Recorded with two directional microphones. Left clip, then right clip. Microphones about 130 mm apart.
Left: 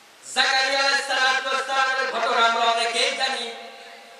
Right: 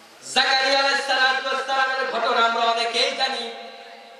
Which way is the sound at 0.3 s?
15° right (ahead or behind).